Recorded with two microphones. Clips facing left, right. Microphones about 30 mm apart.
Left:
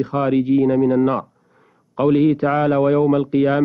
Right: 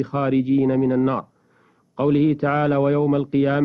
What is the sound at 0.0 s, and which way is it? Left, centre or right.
Speech, centre.